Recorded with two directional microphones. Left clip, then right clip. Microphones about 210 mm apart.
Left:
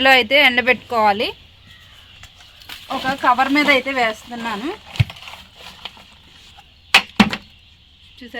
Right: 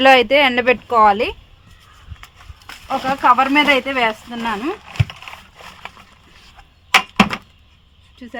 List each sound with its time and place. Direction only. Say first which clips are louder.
0.0 s speech: right 1 dB; 35° right (ahead or behind)
3.0 s speech: right 2 dB; 35° right (ahead or behind)
6.9 s a sound: even; 30° right (ahead or behind)
8.2 s speech: right 2 dB; 40° right (ahead or behind)